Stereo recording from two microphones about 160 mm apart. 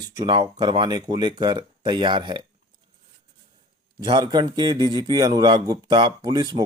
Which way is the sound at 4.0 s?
30° right (ahead or behind).